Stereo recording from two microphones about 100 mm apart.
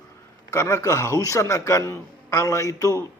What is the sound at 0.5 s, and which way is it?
A man's voice, 30° left (ahead or behind).